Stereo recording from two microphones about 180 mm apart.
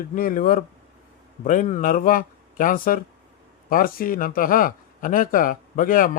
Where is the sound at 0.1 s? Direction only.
45° left (ahead or behind).